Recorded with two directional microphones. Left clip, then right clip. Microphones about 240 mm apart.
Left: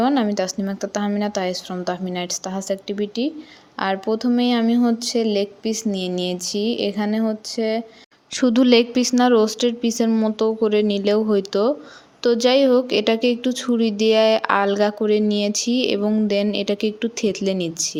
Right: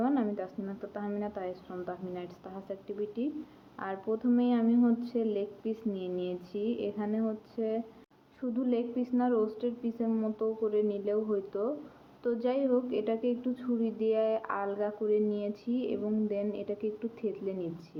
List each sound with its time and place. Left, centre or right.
0.0 s a woman's voice: left
8.4 s a woman's voice: left